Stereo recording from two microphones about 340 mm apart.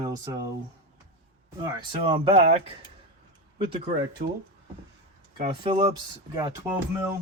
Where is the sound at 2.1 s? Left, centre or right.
Centre.